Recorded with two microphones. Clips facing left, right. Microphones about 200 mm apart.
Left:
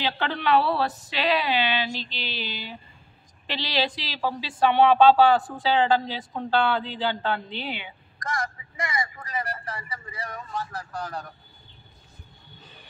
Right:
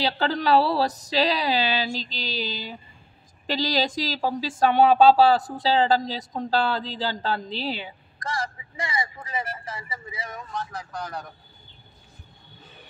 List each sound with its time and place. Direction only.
0.0 s speech: 35° right (ahead or behind)
9.7 s a man's voice: 5° right (ahead or behind)
10.5 s a man's voice: 5° left (ahead or behind)